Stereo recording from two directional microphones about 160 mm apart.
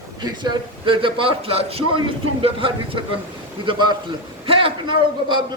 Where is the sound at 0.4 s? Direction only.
30° right (ahead or behind).